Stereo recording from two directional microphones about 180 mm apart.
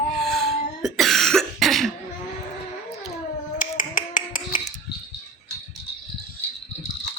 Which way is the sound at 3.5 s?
50° left (ahead or behind).